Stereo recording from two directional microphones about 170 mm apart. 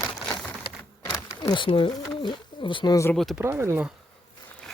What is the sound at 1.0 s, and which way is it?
Speech, 20° left (ahead or behind).